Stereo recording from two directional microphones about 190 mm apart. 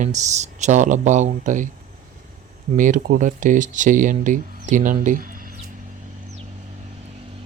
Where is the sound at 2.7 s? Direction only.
45° right (ahead or behind).